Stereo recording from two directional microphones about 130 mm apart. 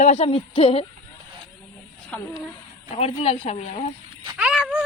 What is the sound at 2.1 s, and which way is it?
Speech, 10° left (ahead or behind).